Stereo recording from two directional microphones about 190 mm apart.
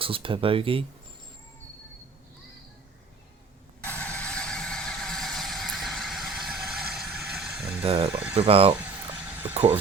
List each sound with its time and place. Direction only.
0.0 s speech: 30° right (ahead or behind)
3.8 s vehicle: 5° left (ahead or behind)
7.8 s speech: 30° right (ahead or behind)
8.1 s speech: 5° right (ahead or behind)
8.4 s speech: 30° right (ahead or behind)